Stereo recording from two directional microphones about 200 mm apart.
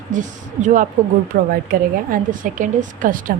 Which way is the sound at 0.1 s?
40° right (ahead or behind).